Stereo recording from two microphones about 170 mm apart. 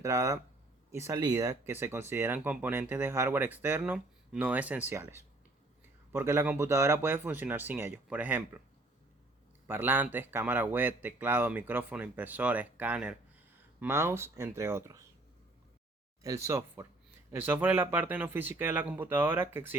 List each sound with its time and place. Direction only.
0.0 s speech: 20° right (ahead or behind)
9.6 s speech: 10° right (ahead or behind)
16.2 s speech: 15° right (ahead or behind)